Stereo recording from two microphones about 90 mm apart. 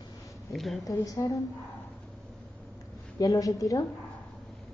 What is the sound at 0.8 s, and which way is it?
Speech, 40° left (ahead or behind).